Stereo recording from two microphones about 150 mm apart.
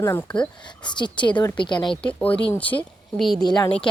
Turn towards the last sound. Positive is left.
turn(degrees=30)  # may be behind; listen again after turning